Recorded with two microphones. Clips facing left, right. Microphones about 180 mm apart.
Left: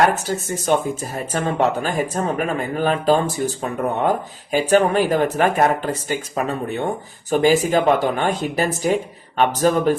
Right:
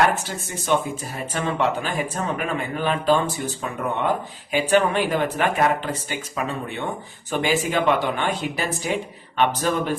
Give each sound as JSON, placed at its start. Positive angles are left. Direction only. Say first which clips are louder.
{"t": 0.3, "sound": "speech", "louder": "left 4 dB", "side_deg": 45}